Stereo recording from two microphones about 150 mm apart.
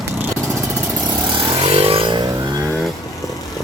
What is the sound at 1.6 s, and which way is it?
Vehicle, 45° right (ahead or behind).